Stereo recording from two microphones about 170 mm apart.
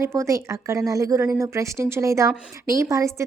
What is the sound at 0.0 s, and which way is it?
A woman's voice, 15° right (ahead or behind).